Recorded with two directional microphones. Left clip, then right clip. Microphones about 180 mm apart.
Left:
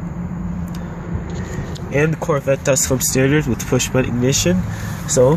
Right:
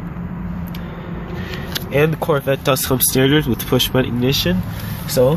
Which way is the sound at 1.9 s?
Centre (ahead or behind).